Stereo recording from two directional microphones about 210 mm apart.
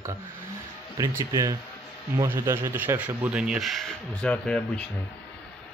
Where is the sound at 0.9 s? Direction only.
15° right (ahead or behind); by 4.8 s 5° left (ahead or behind).